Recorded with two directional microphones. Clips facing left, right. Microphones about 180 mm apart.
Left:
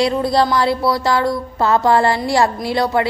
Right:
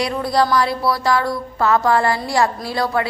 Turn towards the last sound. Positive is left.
turn(degrees=25)  # may be behind; listen again after turning